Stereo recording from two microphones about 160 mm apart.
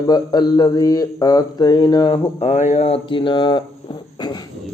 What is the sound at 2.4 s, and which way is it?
Speech, 45° left (ahead or behind).